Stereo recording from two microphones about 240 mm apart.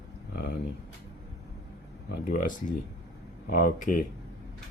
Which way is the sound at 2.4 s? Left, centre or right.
Left.